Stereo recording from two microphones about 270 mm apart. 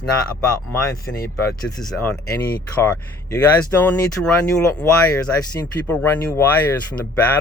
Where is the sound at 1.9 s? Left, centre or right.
Centre.